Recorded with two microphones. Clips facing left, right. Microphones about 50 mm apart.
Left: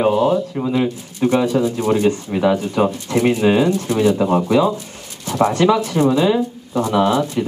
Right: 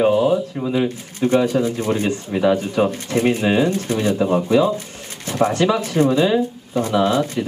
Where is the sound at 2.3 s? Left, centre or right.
Centre.